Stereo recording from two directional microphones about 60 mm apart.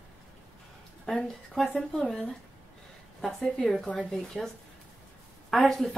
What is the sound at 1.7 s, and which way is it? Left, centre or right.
Speech, centre.